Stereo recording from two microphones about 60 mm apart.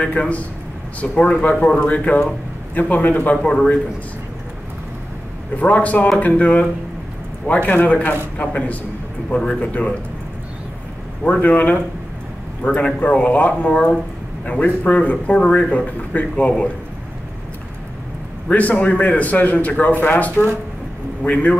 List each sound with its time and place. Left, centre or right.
0.0 s a man's voice: left
5.6 s a man's voice: left
9.3 s speech: centre
9.6 s a man's voice: left
11.2 s a man's voice: left
18.5 s a man's voice: left